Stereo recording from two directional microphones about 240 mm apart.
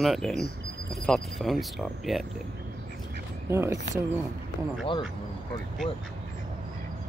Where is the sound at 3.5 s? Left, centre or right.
Centre.